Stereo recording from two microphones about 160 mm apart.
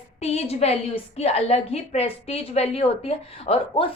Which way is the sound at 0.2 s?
40° left (ahead or behind).